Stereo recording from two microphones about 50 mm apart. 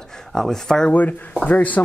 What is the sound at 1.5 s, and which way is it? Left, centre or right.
Speech, left.